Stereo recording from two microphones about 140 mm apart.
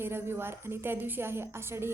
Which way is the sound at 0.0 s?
15° right (ahead or behind).